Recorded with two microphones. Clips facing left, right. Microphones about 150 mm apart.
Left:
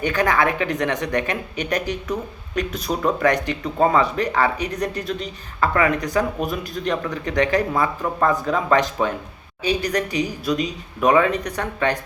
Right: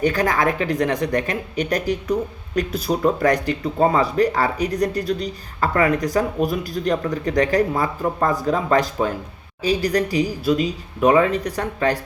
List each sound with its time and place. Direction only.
0.0 s speech: 35° right (ahead or behind)